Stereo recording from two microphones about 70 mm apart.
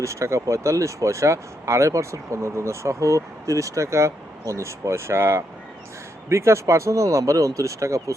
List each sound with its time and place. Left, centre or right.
0.0 s speech: right